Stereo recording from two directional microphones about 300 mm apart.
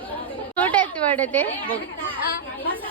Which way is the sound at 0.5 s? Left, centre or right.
Centre.